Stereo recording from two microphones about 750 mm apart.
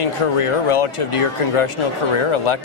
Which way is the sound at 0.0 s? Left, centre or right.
Left.